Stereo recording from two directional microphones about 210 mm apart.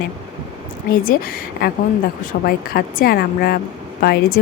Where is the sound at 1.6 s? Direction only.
45° left (ahead or behind).